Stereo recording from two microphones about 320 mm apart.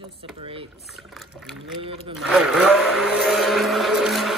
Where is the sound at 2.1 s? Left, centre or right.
Centre.